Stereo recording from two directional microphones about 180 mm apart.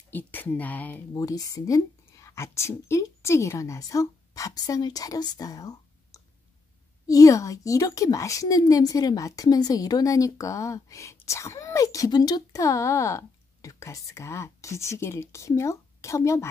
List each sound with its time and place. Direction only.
0.1 s a woman's voice: 10° left (ahead or behind)
1.1 s a woman's voice: 20° left (ahead or behind)